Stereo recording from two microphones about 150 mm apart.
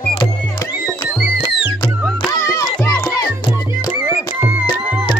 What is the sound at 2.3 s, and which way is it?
Music, 25° left (ahead or behind).